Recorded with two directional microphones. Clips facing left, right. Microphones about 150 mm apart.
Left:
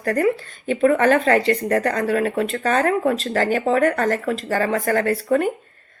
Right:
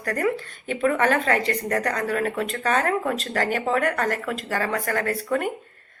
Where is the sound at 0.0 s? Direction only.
30° left (ahead or behind).